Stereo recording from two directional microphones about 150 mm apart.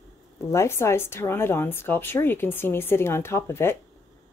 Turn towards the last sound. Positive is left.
turn(degrees=15)  # may be behind; listen again after turning